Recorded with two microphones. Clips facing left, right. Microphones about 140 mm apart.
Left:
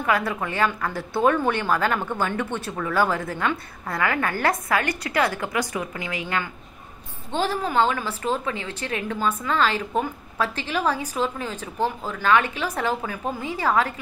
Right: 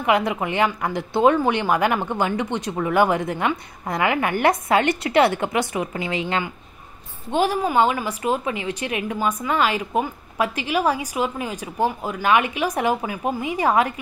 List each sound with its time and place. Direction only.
0.0 s a woman's voice: 20° right (ahead or behind)